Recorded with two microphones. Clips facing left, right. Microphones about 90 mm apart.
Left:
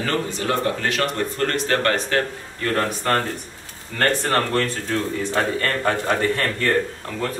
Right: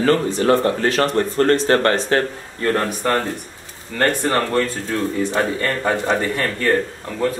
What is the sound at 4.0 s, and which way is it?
A man's voice, 20° right (ahead or behind).